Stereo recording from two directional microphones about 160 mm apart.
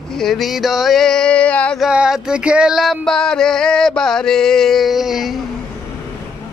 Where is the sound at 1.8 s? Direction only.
5° right (ahead or behind).